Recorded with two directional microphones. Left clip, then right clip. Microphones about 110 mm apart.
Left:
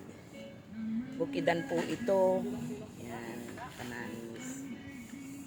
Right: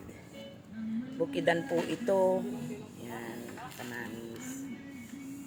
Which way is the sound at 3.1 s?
10° right (ahead or behind).